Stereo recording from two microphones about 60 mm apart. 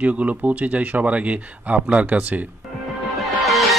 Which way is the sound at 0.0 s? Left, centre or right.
Right.